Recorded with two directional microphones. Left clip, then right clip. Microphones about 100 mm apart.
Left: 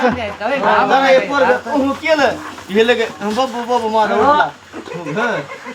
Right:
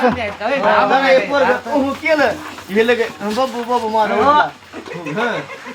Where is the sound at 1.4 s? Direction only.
5° left (ahead or behind).